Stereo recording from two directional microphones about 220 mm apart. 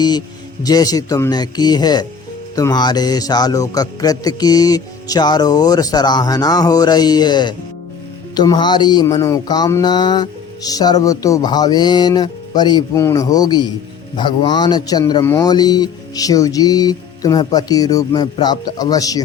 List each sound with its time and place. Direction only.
0.6 s speech: 15° left (ahead or behind)